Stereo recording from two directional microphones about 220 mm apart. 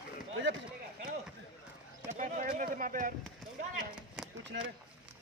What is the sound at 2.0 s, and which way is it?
Speech, 35° right (ahead or behind).